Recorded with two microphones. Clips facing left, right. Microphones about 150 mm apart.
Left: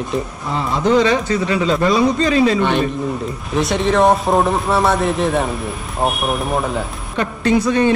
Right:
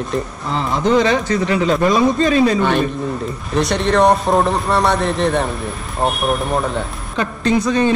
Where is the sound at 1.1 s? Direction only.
20° left (ahead or behind).